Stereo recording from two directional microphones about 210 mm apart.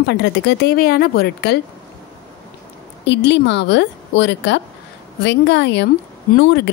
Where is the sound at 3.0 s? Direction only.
55° left (ahead or behind).